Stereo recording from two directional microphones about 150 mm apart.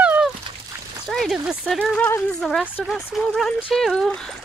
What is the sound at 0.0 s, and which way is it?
Dog, 10° right (ahead or behind).